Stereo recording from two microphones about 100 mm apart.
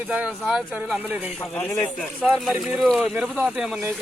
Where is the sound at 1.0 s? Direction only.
15° right (ahead or behind).